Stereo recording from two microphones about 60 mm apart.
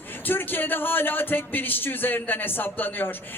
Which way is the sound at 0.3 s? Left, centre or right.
Left.